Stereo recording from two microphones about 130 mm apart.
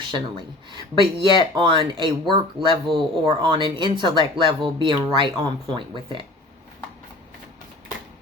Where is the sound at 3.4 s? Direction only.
40° right (ahead or behind).